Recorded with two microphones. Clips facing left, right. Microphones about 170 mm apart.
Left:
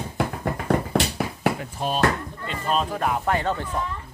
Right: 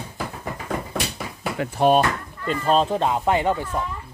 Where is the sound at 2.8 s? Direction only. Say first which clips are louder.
Right 4 dB; 25° right (ahead or behind).